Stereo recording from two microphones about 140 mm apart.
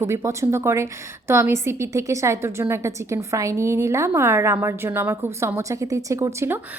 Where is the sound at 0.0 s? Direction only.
20° right (ahead or behind).